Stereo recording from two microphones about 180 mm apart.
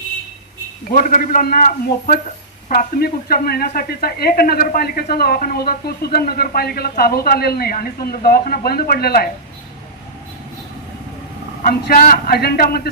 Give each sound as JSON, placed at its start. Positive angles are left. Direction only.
{"t": 0.9, "sound": "a man's voice", "side_deg": 50}
{"t": 11.6, "sound": "speech", "side_deg": 55}